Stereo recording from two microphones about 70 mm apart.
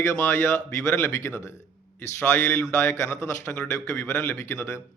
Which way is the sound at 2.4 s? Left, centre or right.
Left.